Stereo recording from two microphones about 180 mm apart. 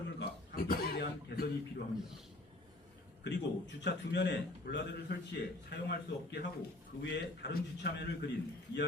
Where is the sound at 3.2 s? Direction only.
75° left (ahead or behind).